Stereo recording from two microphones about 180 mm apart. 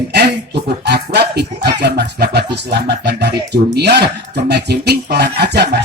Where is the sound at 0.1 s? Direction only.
65° right (ahead or behind).